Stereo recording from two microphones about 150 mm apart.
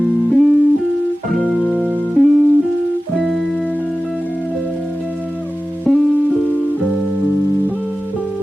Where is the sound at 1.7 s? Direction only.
10° right (ahead or behind).